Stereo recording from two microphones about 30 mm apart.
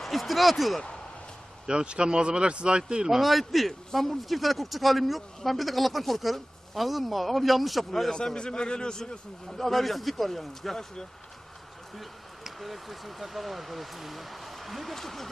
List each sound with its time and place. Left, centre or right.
0.0 s a man's voice: centre
1.6 s speech: right
3.1 s a man's voice: centre
8.1 s a man's voice: left
9.5 s a man's voice: centre
12.5 s a man's voice: centre